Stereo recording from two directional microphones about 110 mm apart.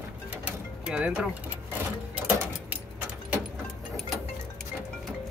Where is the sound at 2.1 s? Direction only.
15° right (ahead or behind).